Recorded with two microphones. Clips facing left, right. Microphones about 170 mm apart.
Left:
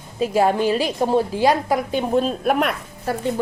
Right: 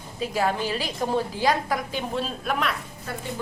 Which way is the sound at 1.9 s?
50° left (ahead or behind).